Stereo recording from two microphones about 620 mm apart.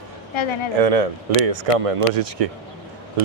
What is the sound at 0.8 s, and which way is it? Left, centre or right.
Speech, right.